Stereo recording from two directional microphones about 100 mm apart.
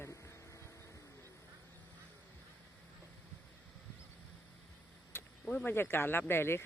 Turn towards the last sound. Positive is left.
turn(degrees=25)  # may be behind; listen again after turning